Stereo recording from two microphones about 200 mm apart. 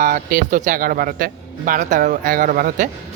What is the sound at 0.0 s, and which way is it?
Speech, 45° right (ahead or behind).